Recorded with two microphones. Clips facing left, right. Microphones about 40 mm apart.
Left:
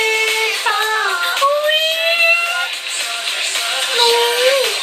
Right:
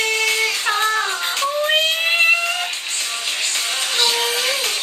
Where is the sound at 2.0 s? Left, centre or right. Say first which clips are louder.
Left 2 dB; centre.